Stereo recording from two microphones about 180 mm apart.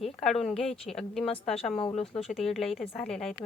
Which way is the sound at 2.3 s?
Centre (ahead or behind).